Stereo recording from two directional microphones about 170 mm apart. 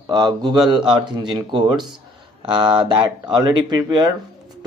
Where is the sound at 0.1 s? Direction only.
25° right (ahead or behind).